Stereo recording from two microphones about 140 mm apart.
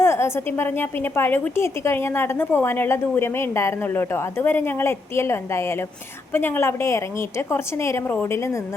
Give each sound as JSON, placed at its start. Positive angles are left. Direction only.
{"t": 0.0, "sound": "a woman's voice", "side_deg": 20}